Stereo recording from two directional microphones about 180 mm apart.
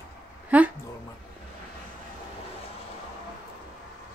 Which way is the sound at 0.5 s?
10° right (ahead or behind).